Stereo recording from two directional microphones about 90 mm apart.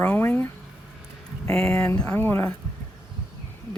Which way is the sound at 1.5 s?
10° left (ahead or behind).